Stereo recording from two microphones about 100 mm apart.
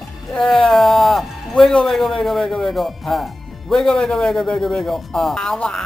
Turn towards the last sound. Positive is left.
turn(degrees=5)  # may be behind; listen again after turning